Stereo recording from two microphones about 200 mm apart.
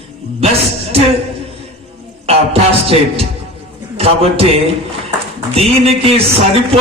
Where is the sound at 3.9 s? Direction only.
30° right (ahead or behind).